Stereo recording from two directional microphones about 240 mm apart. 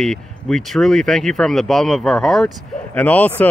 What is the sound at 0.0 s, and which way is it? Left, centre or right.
Speech, centre.